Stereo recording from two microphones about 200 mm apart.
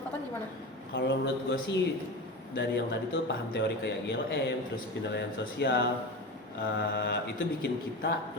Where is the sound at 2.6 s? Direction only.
60° left (ahead or behind).